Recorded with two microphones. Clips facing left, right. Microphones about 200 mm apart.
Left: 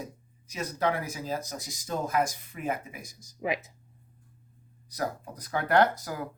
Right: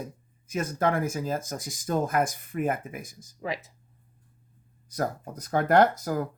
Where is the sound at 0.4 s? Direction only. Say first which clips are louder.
Right 3 dB; 50° right (ahead or behind).